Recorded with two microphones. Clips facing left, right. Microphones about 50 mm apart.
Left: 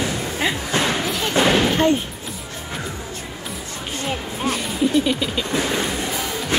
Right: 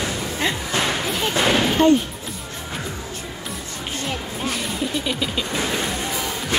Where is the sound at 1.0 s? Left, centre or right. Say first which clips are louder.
Even; centre.